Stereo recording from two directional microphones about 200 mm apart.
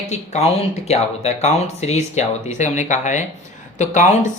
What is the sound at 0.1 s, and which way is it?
Speech, 30° left (ahead or behind).